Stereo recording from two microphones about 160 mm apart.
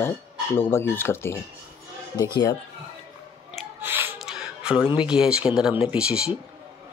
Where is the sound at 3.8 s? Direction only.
15° right (ahead or behind).